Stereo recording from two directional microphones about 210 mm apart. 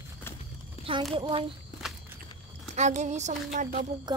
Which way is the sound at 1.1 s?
25° right (ahead or behind).